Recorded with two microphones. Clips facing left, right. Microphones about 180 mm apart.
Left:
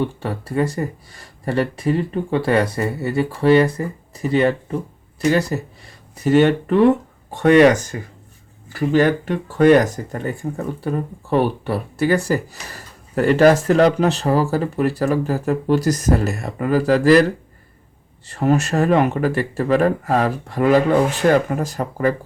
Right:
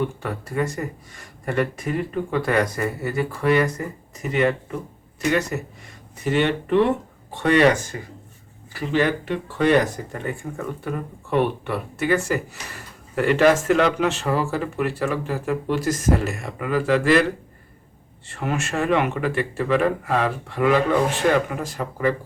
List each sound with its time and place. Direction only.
0.0 s speech: 30° left (ahead or behind)